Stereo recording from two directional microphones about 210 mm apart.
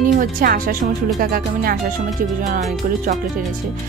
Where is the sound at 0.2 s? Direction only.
40° right (ahead or behind).